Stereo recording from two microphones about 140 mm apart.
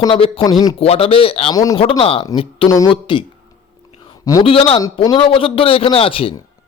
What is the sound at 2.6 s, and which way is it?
Speech, 25° left (ahead or behind).